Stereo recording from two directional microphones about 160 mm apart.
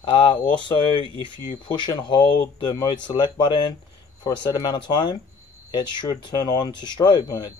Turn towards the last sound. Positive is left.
turn(degrees=25)  # may be behind; listen again after turning